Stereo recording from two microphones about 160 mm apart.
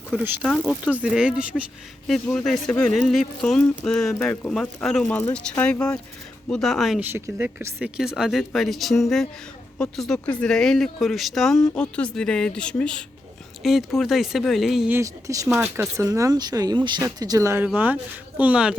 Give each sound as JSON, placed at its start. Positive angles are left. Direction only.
{"t": 0.2, "sound": "speech", "side_deg": -10}
{"t": 0.4, "sound": "speech", "side_deg": 0}
{"t": 7.0, "sound": "speech", "side_deg": -15}
{"t": 14.9, "sound": "speech", "side_deg": -20}